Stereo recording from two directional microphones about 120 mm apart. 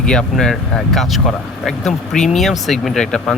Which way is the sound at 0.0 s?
5° left (ahead or behind).